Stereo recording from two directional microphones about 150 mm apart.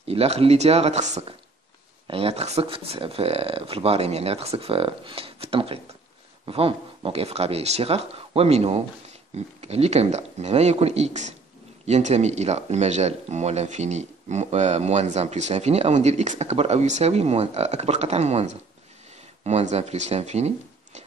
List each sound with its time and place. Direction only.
0.1 s speech: 40° right (ahead or behind)
2.0 s speech: 40° right (ahead or behind)